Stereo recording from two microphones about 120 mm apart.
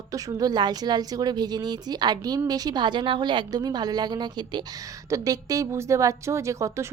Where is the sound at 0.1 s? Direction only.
30° right (ahead or behind).